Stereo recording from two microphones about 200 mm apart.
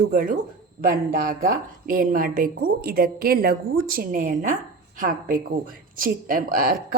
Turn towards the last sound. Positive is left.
turn(degrees=-45)  # may be behind; listen again after turning